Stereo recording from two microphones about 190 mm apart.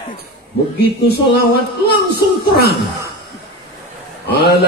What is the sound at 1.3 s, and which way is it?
Speech, 55° left (ahead or behind).